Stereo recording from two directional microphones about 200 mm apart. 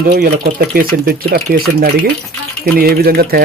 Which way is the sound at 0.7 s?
50° right (ahead or behind).